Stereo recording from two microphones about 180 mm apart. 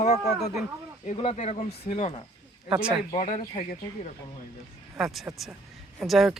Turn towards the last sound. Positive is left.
turn(degrees=0)  # may be behind; listen again after turning